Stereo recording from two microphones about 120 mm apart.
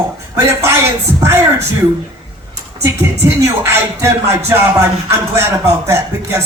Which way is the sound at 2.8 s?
25° right (ahead or behind).